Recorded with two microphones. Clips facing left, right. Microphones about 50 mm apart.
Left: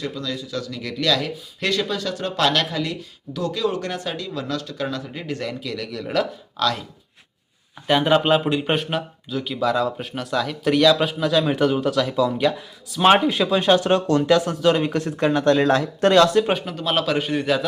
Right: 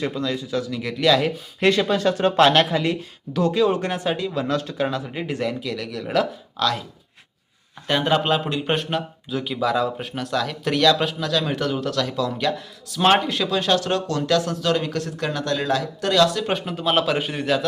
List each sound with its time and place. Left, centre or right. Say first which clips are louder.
0.0 s speech: right 3 dB; right
0.5 s a man's voice: right 3 dB; centre
1.2 s speech: right 6 dB; right
5.5 s speech: right 2 dB; centre
7.9 s speech: left 3 dB; centre; by 16.4 s left
16.4 s speech: left 4 dB; centre
16.6 s speech: right 1 dB; centre